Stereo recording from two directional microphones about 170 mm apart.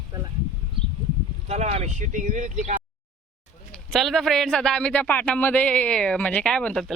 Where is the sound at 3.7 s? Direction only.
Centre (ahead or behind).